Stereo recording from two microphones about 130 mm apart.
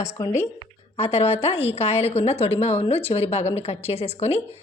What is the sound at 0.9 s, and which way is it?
A woman's voice, 50° left (ahead or behind).